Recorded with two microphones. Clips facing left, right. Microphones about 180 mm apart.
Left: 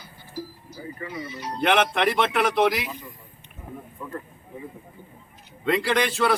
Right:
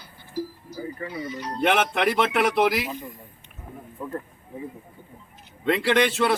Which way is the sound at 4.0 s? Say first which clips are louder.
Right 5 dB; 35° right (ahead or behind).